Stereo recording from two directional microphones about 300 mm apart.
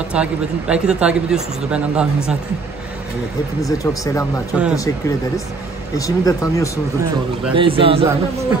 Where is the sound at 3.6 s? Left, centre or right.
Centre.